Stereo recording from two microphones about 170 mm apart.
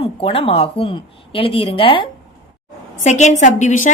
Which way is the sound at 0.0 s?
35° left (ahead or behind).